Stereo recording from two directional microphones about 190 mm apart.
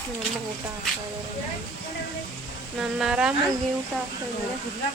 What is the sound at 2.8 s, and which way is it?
Speech, 5° right (ahead or behind).